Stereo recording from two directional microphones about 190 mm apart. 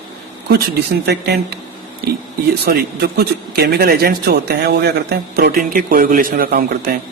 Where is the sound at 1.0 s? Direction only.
60° right (ahead or behind).